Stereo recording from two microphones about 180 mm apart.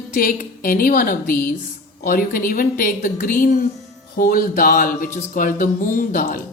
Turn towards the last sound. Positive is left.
turn(degrees=50)  # may be behind; listen again after turning